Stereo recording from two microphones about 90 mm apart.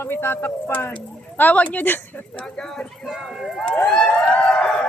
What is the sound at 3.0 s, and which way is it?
Speech, centre (ahead or behind).